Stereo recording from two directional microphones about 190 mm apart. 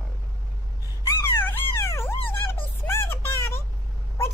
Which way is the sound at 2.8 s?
10° left (ahead or behind).